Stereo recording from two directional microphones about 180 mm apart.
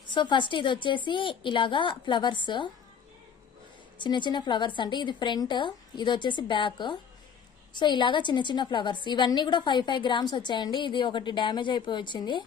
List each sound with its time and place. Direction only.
0.1 s a woman's voice: 25° left (ahead or behind)
3.9 s a woman's voice: 25° left (ahead or behind)